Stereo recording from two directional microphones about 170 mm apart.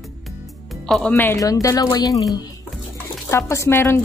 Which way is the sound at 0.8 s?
5° left (ahead or behind).